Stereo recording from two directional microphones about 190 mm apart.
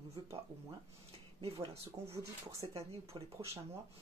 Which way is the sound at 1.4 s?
30° right (ahead or behind).